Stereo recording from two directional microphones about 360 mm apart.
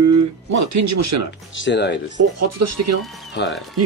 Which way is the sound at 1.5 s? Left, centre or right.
Left.